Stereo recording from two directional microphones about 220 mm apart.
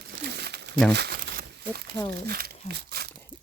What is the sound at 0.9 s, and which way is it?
Crumpling, 50° right (ahead or behind).